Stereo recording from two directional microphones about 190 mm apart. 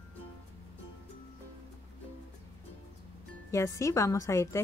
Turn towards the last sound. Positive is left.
turn(degrees=15)  # may be behind; listen again after turning